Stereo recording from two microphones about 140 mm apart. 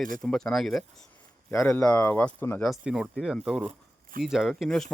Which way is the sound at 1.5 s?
20° left (ahead or behind).